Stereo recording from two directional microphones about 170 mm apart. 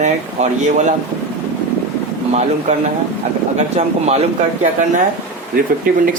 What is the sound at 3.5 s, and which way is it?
Speech, 40° right (ahead or behind).